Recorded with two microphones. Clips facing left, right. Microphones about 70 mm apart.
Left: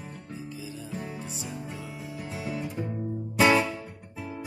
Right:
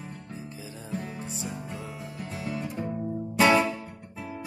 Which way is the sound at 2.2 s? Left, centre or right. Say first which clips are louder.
Even; centre.